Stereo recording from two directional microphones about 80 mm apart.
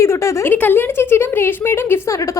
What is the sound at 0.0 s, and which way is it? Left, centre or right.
Speech, left.